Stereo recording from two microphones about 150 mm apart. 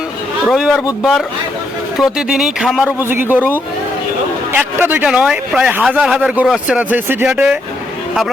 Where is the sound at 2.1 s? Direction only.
5° right (ahead or behind).